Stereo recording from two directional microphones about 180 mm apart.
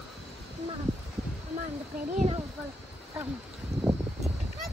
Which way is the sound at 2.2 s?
35° right (ahead or behind).